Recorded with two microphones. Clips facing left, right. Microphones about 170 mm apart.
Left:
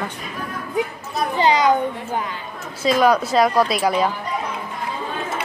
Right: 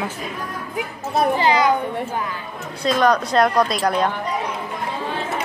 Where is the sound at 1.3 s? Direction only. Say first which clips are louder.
Left 4 dB; 20° left (ahead or behind).